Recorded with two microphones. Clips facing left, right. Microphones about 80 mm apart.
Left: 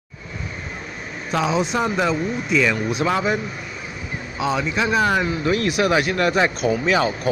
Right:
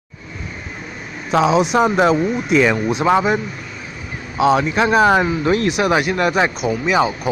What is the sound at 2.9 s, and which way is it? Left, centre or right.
Speech, right.